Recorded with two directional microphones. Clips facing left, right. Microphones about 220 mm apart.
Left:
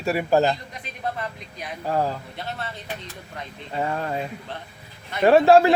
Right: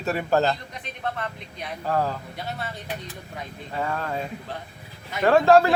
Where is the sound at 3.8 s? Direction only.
20° left (ahead or behind).